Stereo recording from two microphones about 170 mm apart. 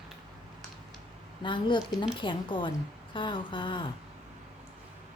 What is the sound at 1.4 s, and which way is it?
A woman's voice, 30° left (ahead or behind).